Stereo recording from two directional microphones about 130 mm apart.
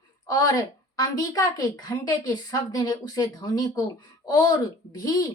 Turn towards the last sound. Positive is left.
turn(degrees=25)  # may be behind; listen again after turning